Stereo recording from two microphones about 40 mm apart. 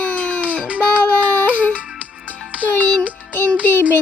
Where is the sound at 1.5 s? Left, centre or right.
Left.